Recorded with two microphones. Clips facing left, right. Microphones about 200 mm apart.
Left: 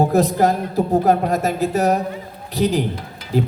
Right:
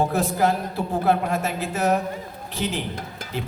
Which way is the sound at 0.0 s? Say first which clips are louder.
Left 5 dB; 40° left (ahead or behind).